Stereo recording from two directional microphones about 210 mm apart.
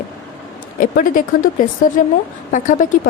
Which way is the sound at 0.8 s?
40° left (ahead or behind).